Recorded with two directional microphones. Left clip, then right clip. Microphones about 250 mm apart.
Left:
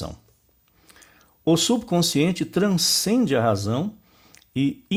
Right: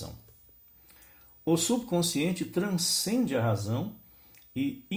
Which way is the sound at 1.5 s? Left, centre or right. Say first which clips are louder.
Left 7 dB; left.